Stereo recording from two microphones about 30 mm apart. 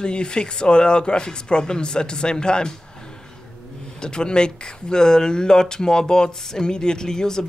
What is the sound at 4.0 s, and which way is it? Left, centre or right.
Speech, left.